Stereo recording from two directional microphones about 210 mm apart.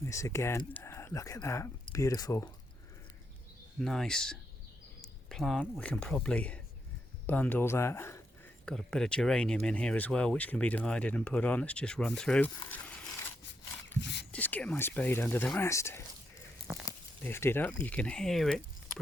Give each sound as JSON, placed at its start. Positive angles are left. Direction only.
{"t": 0.0, "sound": "speech", "side_deg": 15}
{"t": 3.8, "sound": "speech", "side_deg": 0}
{"t": 14.0, "sound": "whispering", "side_deg": 55}
{"t": 14.3, "sound": "speech", "side_deg": 5}